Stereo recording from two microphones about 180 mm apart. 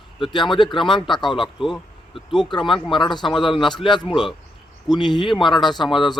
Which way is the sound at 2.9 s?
25° left (ahead or behind).